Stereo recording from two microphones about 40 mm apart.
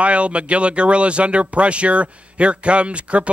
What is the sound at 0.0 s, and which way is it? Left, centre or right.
Speech, right.